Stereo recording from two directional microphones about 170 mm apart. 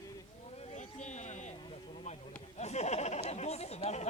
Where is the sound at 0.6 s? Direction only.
45° left (ahead or behind).